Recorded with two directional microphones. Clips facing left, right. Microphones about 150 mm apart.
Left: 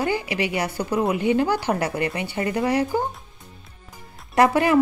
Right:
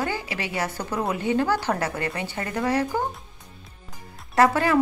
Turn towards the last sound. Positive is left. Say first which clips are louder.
# left 2 dB
turn(degrees=15)  # may be behind; listen again after turning